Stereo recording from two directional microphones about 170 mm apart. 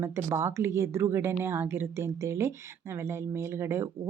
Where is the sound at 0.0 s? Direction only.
15° right (ahead or behind).